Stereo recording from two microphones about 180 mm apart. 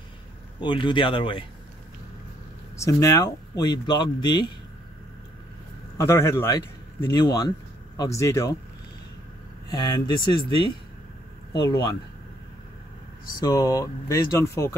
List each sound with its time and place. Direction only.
0.6 s speech: 25° left (ahead or behind)
2.8 s speech: 15° left (ahead or behind)
5.9 s a man's voice: 15° left (ahead or behind)
9.7 s speech: 25° left (ahead or behind)
13.4 s speech: 20° left (ahead or behind)